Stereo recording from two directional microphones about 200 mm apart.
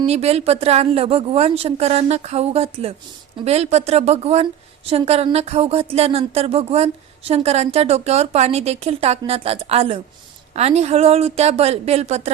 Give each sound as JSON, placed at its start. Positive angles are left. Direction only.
{"t": 0.0, "sound": "speech", "side_deg": -30}